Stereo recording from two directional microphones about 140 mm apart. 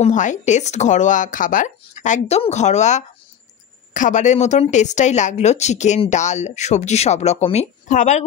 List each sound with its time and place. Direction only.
0.0 s speech: 60° left (ahead or behind)